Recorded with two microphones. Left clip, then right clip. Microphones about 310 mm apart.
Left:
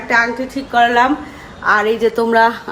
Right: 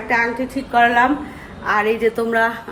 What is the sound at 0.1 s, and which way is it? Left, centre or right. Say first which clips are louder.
A woman's voice: left 4 dB; centre.